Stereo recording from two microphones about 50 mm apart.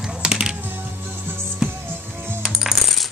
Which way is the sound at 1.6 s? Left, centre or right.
Centre.